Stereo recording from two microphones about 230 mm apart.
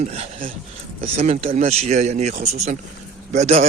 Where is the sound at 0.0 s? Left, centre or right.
Right.